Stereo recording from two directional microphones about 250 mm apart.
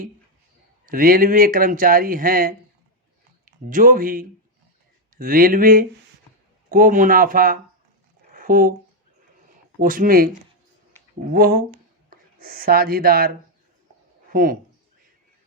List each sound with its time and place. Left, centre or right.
0.9 s speech: right
8.3 s a sound: right
9.8 s speech: right
11.3 s speech: right
14.3 s speech: right